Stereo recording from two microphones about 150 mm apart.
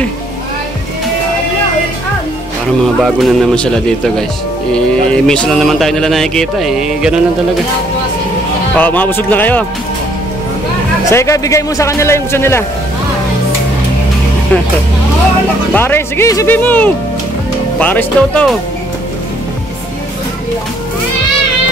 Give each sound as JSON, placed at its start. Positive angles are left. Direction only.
{"t": 3.0, "sound": "speech", "side_deg": 5}
{"t": 8.7, "sound": "speech", "side_deg": 10}
{"t": 11.1, "sound": "a man's voice", "side_deg": 20}
{"t": 15.7, "sound": "speech", "side_deg": 15}